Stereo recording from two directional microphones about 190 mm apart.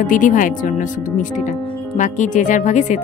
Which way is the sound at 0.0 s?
45° left (ahead or behind).